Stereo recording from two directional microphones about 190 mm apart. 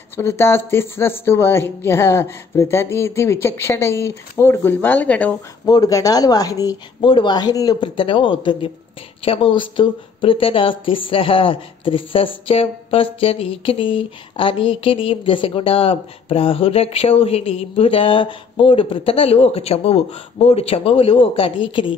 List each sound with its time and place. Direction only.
0.1 s speech: 15° left (ahead or behind)
5.7 s speech: 20° left (ahead or behind)